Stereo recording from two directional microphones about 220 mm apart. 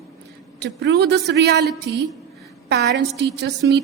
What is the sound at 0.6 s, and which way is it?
A woman's voice, 50° right (ahead or behind).